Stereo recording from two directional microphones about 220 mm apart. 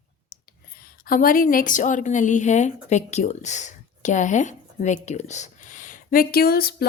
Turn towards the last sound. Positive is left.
turn(degrees=45)  # may be behind; listen again after turning